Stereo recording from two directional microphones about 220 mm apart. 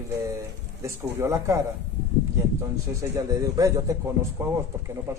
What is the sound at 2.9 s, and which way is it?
Speech, 15° right (ahead or behind).